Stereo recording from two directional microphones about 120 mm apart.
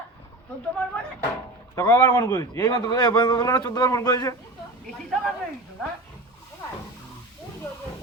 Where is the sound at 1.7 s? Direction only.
25° left (ahead or behind).